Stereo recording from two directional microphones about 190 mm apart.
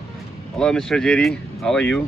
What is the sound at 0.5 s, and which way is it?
Speech, 5° left (ahead or behind).